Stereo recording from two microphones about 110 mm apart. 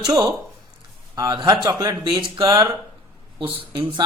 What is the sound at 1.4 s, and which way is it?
Speech, 35° right (ahead or behind).